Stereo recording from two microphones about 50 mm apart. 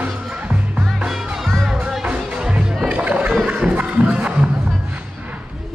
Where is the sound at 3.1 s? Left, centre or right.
Right.